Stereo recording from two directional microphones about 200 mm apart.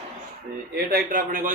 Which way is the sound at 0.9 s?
45° right (ahead or behind).